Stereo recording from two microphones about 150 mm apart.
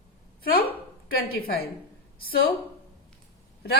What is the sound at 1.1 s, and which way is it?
A woman's voice, 90° left.